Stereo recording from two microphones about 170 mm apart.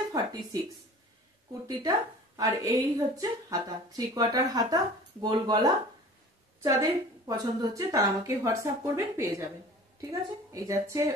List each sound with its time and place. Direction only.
0.1 s a woman's voice: 20° right (ahead or behind)
10.5 s a woman's voice: 20° right (ahead or behind)